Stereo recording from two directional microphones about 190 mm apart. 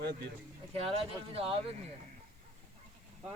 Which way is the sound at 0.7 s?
30° right (ahead or behind).